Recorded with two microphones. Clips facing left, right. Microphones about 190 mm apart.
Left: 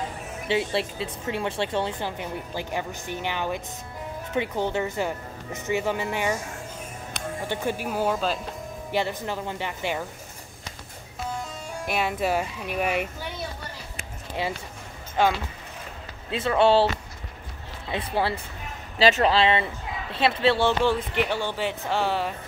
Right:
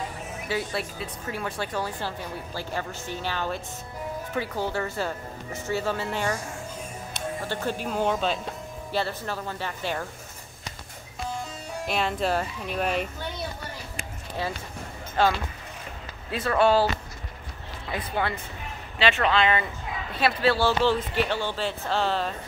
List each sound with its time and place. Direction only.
0.5 s a woman's voice: 25° left (ahead or behind)
7.4 s speech: 15° left (ahead or behind)
8.9 s speech: 15° left (ahead or behind)
11.9 s speech: 10° left (ahead or behind)
14.4 s a woman's voice: 15° left (ahead or behind)